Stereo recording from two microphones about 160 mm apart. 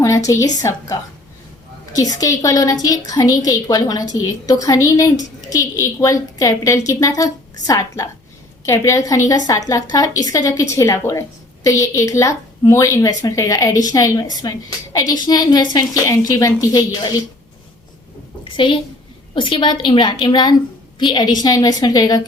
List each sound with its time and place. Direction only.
0.0 s a woman's voice: 20° left (ahead or behind)
18.5 s a woman's voice: 30° left (ahead or behind)